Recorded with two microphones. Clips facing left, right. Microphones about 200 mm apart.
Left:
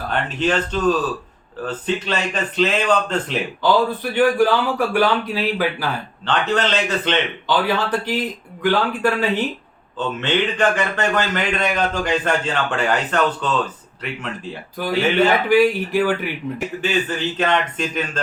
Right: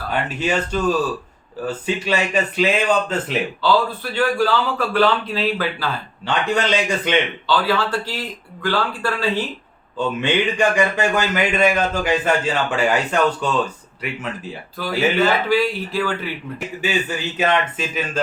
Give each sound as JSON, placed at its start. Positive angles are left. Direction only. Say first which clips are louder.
{"t": 0.1, "sound": "speech", "louder": "left 1 dB", "side_deg": -10}
{"t": 3.6, "sound": "a man's voice", "louder": "left 2 dB", "side_deg": 15}
{"t": 6.2, "sound": "speech", "louder": "even", "side_deg": -10}
{"t": 7.4, "sound": "speech", "louder": "even", "side_deg": 20}
{"t": 10.0, "sound": "speech", "louder": "right 1 dB", "side_deg": -10}
{"t": 15.4, "sound": "a man's voice", "louder": "left 4 dB", "side_deg": 15}
{"t": 16.8, "sound": "speech", "louder": "left 1 dB", "side_deg": -10}